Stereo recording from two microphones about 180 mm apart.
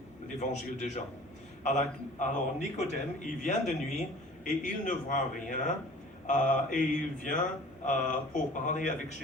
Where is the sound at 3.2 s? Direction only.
45° left (ahead or behind).